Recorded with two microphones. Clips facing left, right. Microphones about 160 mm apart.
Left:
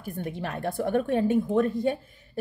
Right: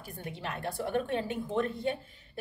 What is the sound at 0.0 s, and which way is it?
Speech, 50° left (ahead or behind).